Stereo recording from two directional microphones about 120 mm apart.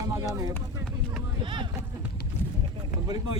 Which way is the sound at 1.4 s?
45° right (ahead or behind).